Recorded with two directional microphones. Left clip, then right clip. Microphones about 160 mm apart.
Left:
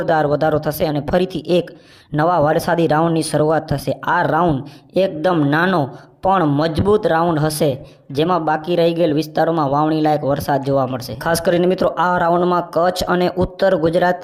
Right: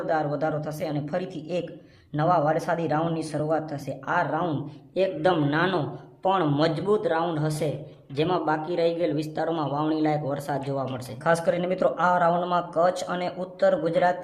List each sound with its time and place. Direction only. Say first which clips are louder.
0.0 s speech: left 10 dB; 40° left (ahead or behind)